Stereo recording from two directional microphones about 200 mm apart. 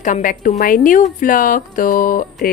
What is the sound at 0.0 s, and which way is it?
Speech, 40° left (ahead or behind).